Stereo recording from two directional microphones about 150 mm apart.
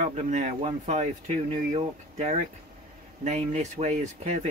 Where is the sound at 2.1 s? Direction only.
55° right (ahead or behind).